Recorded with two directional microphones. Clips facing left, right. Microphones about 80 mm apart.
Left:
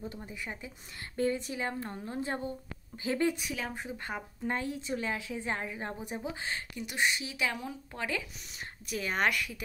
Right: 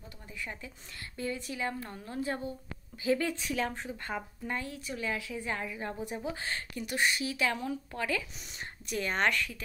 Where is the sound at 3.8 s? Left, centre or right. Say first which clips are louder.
Right 1 dB; centre.